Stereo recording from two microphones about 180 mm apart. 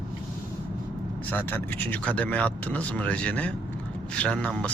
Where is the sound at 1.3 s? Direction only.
10° left (ahead or behind).